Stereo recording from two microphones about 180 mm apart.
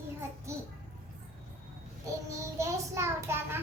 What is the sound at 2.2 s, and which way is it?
Child singing, 15° right (ahead or behind).